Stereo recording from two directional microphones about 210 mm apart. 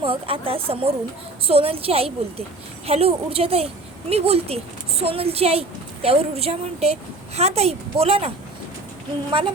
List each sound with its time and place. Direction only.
0.0 s a woman's voice: 25° right (ahead or behind)